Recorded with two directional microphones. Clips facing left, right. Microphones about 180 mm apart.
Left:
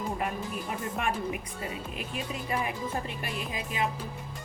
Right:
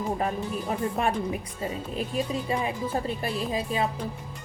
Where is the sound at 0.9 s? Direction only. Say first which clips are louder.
Right 4 dB; 35° right (ahead or behind).